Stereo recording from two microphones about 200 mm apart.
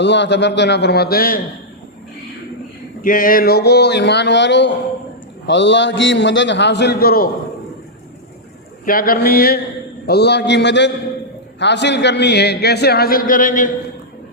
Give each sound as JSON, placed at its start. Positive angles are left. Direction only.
{"t": 0.0, "sound": "a man's voice", "side_deg": 60}
{"t": 3.0, "sound": "a man's voice", "side_deg": 45}
{"t": 8.8, "sound": "a man's voice", "side_deg": 45}